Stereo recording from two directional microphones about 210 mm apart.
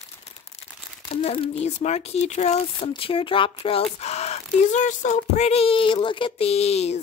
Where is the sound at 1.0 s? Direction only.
30° left (ahead or behind).